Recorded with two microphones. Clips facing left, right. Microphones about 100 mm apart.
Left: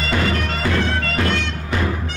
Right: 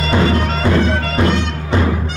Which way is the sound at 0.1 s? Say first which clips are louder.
Right 6 dB; 25° right (ahead or behind).